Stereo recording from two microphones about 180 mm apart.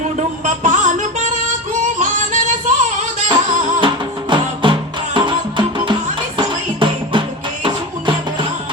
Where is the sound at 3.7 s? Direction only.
25° right (ahead or behind).